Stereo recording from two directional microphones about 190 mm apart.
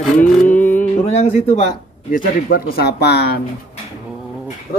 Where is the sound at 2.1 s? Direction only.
50° left (ahead or behind).